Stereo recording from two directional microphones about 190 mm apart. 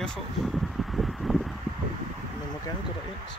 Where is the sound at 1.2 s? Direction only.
Centre (ahead or behind).